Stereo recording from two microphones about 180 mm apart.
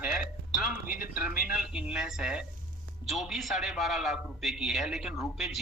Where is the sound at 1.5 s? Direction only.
5° right (ahead or behind).